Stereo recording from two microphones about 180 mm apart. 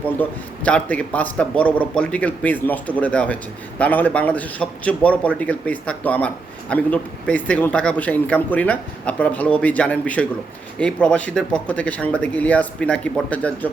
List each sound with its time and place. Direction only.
0.2 s a man's voice: 10° left (ahead or behind)